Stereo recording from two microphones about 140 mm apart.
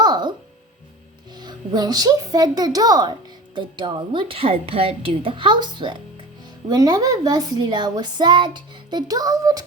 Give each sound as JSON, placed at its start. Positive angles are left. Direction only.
{"t": 0.0, "sound": "music", "side_deg": -30}
{"t": 1.4, "sound": "a woman's voice", "side_deg": -30}